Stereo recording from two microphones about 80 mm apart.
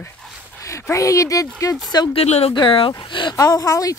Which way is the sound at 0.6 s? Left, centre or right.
Left.